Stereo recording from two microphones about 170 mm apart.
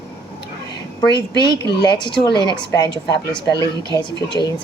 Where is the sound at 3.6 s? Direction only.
25° left (ahead or behind).